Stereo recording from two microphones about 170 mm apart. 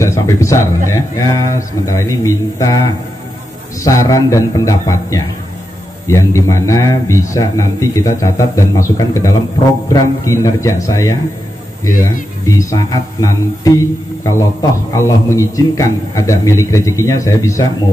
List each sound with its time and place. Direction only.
0.0 s speech: 20° left (ahead or behind)